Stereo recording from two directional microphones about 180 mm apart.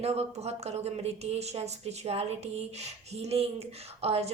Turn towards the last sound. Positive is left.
turn(degrees=-35)  # may be behind; listen again after turning